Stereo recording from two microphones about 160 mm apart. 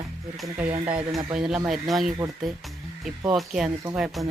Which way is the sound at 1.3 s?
5° right (ahead or behind).